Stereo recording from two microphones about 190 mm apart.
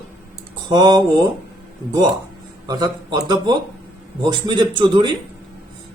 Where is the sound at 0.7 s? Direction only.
20° right (ahead or behind).